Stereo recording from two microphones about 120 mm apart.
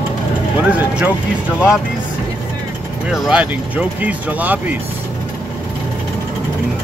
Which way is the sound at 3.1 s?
10° right (ahead or behind).